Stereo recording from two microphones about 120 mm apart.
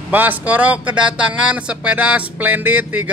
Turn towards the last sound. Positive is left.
turn(degrees=-15)  # may be behind; listen again after turning